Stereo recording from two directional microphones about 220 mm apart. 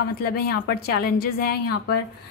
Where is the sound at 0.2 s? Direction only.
45° left (ahead or behind).